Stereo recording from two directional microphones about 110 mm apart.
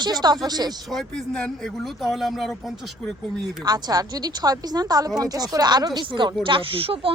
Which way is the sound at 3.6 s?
35° right (ahead or behind).